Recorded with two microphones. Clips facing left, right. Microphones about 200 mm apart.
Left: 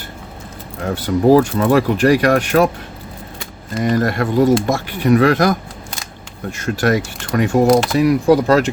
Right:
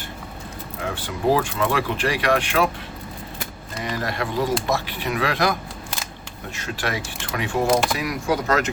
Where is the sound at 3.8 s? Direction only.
50° left (ahead or behind).